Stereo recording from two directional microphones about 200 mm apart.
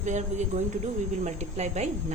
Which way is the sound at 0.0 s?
35° right (ahead or behind).